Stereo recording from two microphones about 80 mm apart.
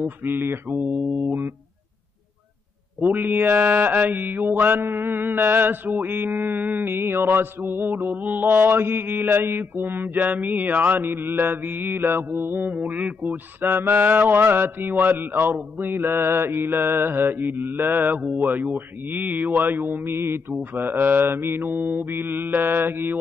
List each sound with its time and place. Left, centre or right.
0.0 s mantra: right
3.2 s mantra: right